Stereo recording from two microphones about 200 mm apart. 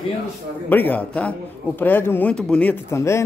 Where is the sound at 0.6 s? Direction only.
10° left (ahead or behind).